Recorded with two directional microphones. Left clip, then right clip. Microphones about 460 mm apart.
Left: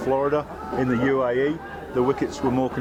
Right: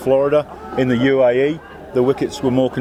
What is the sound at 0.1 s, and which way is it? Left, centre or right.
Speech, right.